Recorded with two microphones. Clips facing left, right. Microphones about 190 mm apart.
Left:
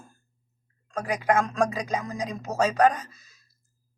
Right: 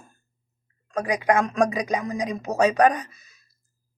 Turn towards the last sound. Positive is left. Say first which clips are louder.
# right 3 dB
turn(degrees=-20)  # may be behind; listen again after turning